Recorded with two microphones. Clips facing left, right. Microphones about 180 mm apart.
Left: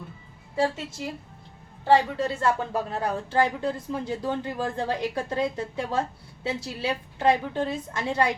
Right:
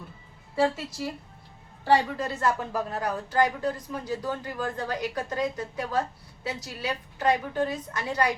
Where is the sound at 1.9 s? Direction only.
30° left (ahead or behind).